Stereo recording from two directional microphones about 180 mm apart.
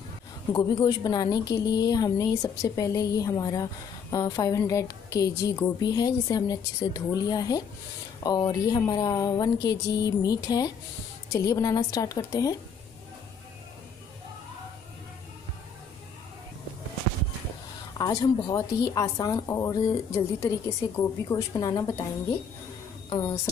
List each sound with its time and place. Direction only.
0.5 s a woman's voice: 20° left (ahead or behind)
17.9 s a woman's voice: 20° left (ahead or behind)
23.0 s speech: 20° left (ahead or behind)